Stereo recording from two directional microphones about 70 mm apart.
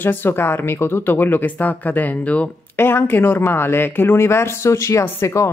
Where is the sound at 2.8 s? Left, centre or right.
Left.